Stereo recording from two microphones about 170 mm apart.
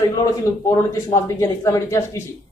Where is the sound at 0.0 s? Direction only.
20° left (ahead or behind).